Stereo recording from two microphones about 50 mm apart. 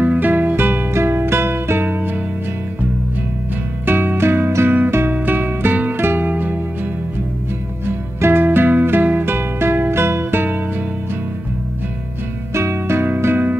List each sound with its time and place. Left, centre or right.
0.0 s music: right
0.3 s music: right
3.8 s music: right
4.6 s music: right
8.2 s music: right
12.5 s music: right
13.1 s music: right